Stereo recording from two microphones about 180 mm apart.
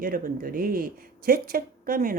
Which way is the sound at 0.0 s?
55° right (ahead or behind).